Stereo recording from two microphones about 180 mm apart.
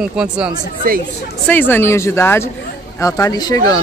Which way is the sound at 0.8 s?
50° right (ahead or behind).